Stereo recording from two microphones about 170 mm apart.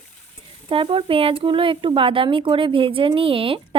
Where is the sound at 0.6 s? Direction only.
30° right (ahead or behind).